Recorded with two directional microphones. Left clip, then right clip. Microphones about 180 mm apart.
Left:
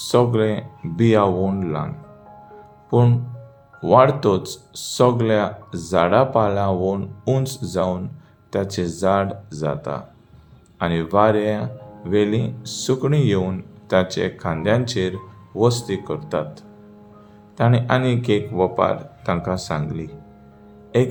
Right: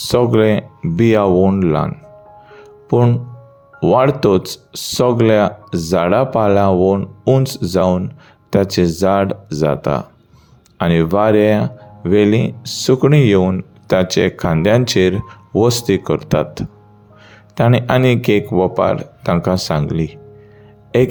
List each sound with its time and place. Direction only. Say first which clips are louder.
0.1 s speech: right 5 dB; 40° right (ahead or behind)